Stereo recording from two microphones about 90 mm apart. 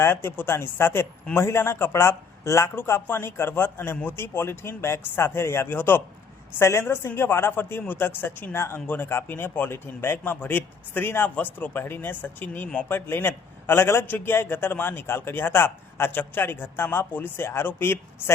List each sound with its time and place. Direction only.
0.0 s speech: 25° left (ahead or behind)